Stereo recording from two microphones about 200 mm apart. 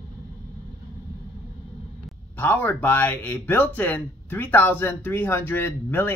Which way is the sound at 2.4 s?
10° left (ahead or behind).